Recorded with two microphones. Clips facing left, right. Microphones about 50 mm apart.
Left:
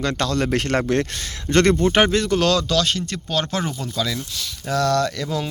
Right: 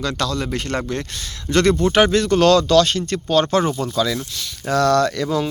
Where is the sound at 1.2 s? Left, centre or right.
Left.